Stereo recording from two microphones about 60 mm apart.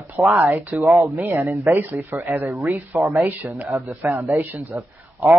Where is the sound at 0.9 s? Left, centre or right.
Right.